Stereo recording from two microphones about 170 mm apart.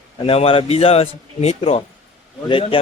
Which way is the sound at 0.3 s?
35° left (ahead or behind).